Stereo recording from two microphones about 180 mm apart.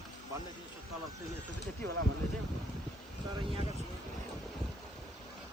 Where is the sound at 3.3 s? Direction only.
30° right (ahead or behind).